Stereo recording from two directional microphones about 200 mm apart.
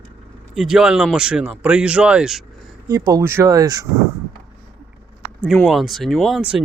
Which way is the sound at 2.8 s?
20° right (ahead or behind).